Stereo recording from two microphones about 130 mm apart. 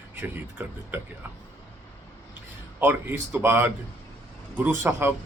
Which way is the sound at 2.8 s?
15° right (ahead or behind).